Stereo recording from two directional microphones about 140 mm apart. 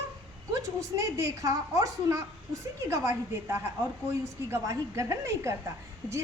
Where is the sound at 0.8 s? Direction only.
25° right (ahead or behind).